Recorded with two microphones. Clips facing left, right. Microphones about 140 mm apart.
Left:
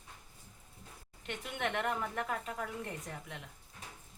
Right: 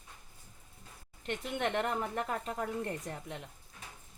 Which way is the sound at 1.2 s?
35° right (ahead or behind).